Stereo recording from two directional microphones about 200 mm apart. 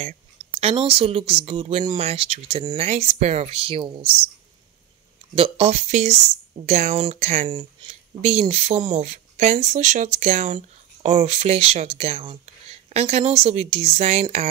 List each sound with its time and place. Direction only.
0.4 s speech: 30° right (ahead or behind)
5.3 s speech: 30° right (ahead or behind)